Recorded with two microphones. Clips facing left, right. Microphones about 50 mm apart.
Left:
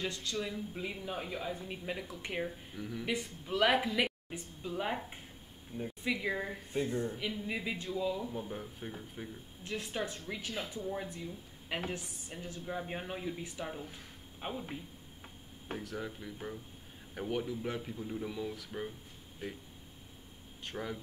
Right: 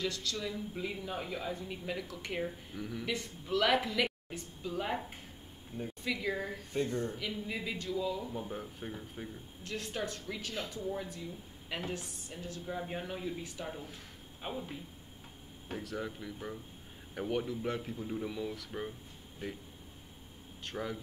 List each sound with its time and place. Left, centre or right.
0.0 s speech: left; by 1.5 s centre
1.5 s speech: centre
2.4 s speech: centre
3.1 s speech: centre
6.0 s a woman's voice: centre
8.3 s speech: centre
9.6 s a woman's voice: left
11.7 s a woman's voice: left
12.6 s speech: centre
13.7 s speech: centre
15.8 s speech: centre
20.6 s speech: centre